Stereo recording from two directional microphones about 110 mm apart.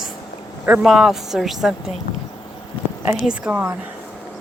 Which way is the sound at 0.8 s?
5° right (ahead or behind).